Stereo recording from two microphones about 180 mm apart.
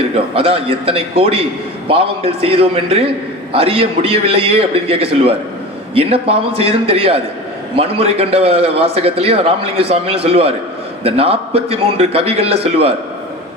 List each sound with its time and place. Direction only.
0.1 s a man's voice: 30° right (ahead or behind)